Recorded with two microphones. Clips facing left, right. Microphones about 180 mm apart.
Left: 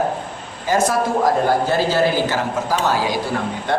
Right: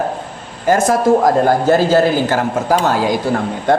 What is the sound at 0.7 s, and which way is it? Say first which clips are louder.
Speech: right 6 dB; 50° right (ahead or behind).